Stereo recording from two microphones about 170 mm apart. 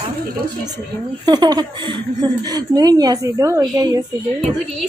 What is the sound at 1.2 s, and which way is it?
Speech, 25° right (ahead or behind).